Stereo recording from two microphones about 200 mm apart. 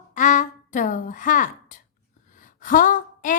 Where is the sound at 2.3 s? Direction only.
40° left (ahead or behind).